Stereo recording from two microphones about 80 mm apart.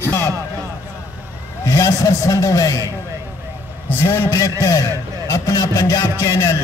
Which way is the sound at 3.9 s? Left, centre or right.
Left.